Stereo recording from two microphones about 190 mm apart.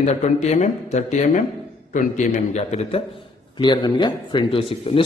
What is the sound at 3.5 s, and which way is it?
Speech, 25° left (ahead or behind).